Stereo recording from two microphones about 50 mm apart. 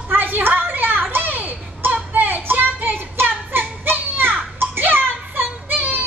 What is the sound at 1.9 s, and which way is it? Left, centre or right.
Child singing, right.